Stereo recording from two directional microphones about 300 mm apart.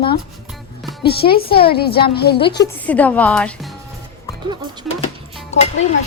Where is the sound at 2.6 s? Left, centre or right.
Centre.